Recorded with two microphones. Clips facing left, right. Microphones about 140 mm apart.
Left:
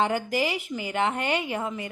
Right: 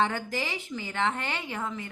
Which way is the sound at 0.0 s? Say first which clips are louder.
Left 4 dB; 10° left (ahead or behind).